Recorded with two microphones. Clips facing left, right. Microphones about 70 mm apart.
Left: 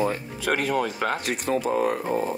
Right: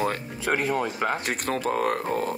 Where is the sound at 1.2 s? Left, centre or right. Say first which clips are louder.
Left 2 dB; right.